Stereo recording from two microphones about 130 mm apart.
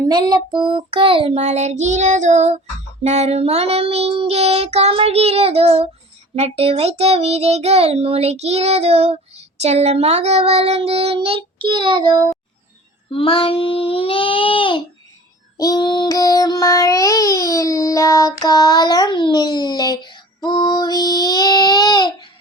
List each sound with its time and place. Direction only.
0.0 s a child's voice: 30° right (ahead or behind)
13.1 s child singing: 45° left (ahead or behind)